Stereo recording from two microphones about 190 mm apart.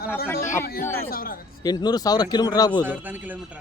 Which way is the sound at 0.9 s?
50° left (ahead or behind).